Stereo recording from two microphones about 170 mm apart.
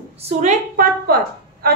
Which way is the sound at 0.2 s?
40° right (ahead or behind).